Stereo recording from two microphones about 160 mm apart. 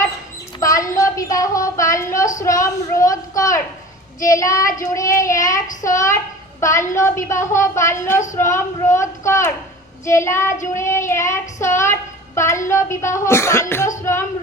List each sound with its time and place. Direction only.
0.6 s child singing: 20° left (ahead or behind)
2.4 s a sound: 20° left (ahead or behind)
4.2 s child singing: 20° left (ahead or behind)